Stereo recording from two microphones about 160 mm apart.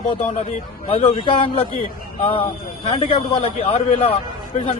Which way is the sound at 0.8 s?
35° left (ahead or behind).